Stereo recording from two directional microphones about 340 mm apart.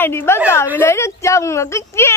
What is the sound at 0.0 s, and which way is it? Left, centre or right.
Speech, centre.